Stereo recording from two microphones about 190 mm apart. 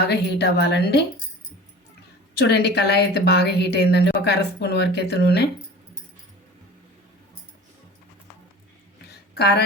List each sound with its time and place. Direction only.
0.1 s a woman's voice: 60° left (ahead or behind)
2.4 s a woman's voice: 60° left (ahead or behind)
9.0 s a sound: 55° left (ahead or behind)